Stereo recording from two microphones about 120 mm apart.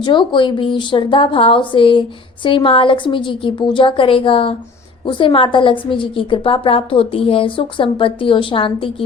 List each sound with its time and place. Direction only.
0.0 s a woman's voice: 40° left (ahead or behind)